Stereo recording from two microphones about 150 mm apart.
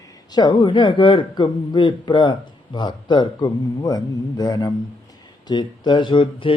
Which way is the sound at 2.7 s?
30° left (ahead or behind).